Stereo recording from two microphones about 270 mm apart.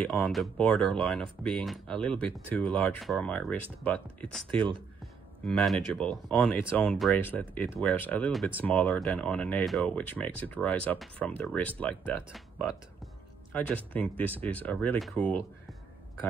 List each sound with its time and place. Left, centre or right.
0.0 s speech: centre
4.6 s speech: centre
5.4 s speech: centre